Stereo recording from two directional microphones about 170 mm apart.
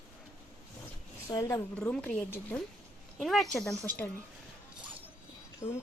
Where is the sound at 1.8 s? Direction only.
10° left (ahead or behind).